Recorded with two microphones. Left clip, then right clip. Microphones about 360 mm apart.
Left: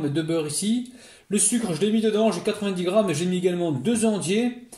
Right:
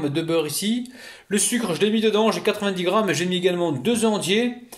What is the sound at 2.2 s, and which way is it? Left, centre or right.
Speech, right.